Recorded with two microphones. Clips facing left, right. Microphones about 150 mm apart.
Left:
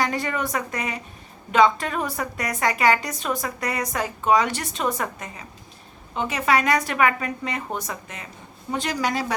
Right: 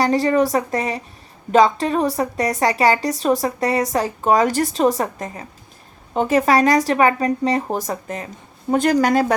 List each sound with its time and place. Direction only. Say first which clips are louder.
0.0 s a woman's voice: right 9 dB; 35° right (ahead or behind); by 9.2 s 50° right (ahead or behind)